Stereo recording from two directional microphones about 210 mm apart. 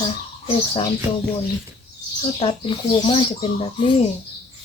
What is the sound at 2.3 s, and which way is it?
Speech, 25° left (ahead or behind).